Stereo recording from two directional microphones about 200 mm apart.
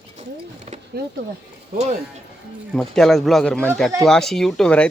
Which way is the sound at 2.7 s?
Centre (ahead or behind).